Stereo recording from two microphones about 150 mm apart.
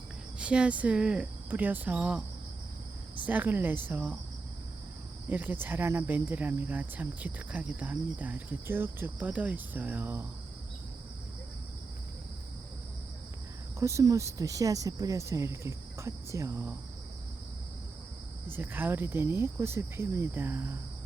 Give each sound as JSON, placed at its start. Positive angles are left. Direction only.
{"t": 0.3, "sound": "cricket", "side_deg": -5}
{"t": 3.2, "sound": "cricket", "side_deg": -10}
{"t": 5.3, "sound": "cricket", "side_deg": -10}
{"t": 13.7, "sound": "speech", "side_deg": -20}
{"t": 18.4, "sound": "cricket", "side_deg": -15}